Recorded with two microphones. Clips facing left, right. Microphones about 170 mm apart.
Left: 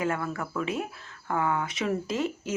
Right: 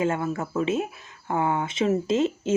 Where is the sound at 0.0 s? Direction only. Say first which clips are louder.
Right 4 dB; 25° right (ahead or behind).